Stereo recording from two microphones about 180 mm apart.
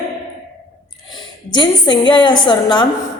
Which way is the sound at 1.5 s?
25° left (ahead or behind).